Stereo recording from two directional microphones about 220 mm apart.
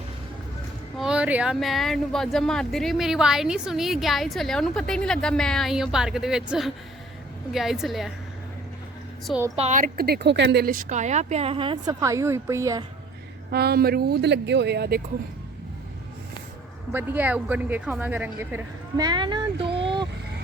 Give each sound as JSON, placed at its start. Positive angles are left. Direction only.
{"t": 0.9, "sound": "speech", "side_deg": -5}
{"t": 9.2, "sound": "speech", "side_deg": -5}
{"t": 9.6, "sound": "speech", "side_deg": -35}
{"t": 13.5, "sound": "speech", "side_deg": -45}
{"t": 16.9, "sound": "speech", "side_deg": -10}